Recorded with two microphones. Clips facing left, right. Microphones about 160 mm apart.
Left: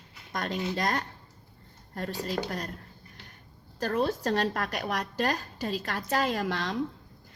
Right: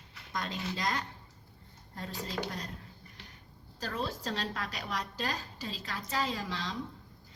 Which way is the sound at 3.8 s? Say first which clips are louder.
Left 9 dB; 60° left (ahead or behind).